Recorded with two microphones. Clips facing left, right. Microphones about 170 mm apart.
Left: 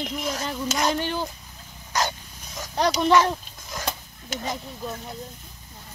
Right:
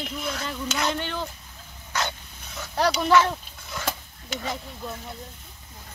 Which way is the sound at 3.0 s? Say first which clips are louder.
Left 2 dB; 35° left (ahead or behind).